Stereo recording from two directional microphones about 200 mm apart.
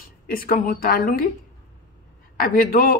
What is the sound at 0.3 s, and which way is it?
Speech, 45° left (ahead or behind).